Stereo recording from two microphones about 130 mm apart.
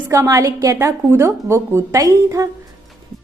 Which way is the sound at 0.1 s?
25° right (ahead or behind).